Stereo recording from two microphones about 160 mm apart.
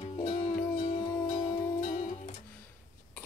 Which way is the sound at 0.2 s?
25° left (ahead or behind).